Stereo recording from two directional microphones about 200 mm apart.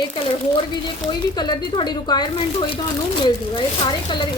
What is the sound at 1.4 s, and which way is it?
Speech, 20° left (ahead or behind).